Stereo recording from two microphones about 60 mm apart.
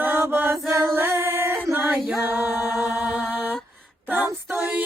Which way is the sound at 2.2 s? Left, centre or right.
Right.